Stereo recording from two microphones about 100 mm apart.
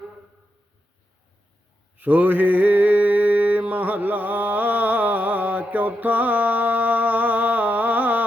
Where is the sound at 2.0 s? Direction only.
15° right (ahead or behind).